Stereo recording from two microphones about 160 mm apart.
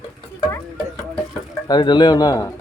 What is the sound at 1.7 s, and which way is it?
Speech, 25° left (ahead or behind).